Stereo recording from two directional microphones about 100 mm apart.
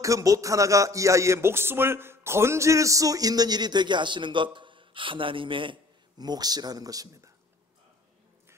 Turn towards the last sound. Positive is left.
turn(degrees=-40)  # may be behind; listen again after turning